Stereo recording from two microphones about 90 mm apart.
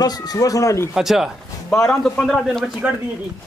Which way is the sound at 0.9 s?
5° right (ahead or behind).